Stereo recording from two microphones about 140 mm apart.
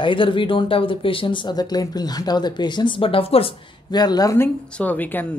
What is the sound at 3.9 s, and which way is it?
Speech, 30° left (ahead or behind).